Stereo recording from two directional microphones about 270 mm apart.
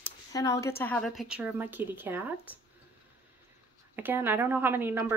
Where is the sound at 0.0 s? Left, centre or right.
Centre.